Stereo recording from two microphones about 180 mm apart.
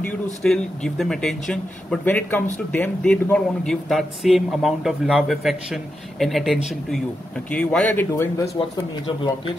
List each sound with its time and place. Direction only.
0.0 s speech: 5° left (ahead or behind)